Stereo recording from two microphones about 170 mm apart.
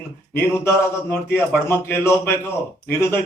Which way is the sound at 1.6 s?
15° left (ahead or behind).